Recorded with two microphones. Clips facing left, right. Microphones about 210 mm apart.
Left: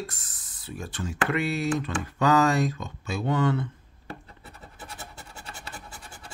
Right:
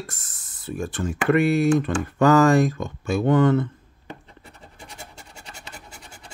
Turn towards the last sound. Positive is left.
turn(degrees=-25)  # may be behind; listen again after turning